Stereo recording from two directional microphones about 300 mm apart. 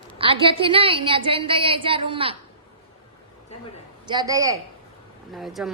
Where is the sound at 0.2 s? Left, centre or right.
Centre.